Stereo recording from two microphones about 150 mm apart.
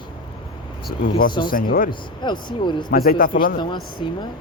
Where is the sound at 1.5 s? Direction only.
75° left (ahead or behind).